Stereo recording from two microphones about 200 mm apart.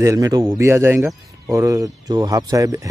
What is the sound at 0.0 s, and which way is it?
Speech, 15° right (ahead or behind).